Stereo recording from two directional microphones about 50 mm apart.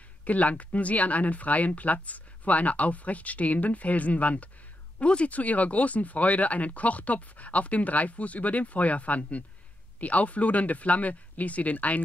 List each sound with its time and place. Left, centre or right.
0.2 s speech: left